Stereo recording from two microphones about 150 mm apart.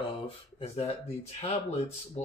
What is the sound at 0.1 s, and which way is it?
Speech, 40° left (ahead or behind).